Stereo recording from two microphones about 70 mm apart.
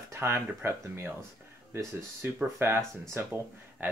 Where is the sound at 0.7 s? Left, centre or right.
Right.